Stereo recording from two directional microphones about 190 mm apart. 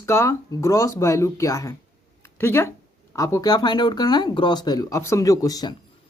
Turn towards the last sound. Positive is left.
turn(degrees=20)  # may be behind; listen again after turning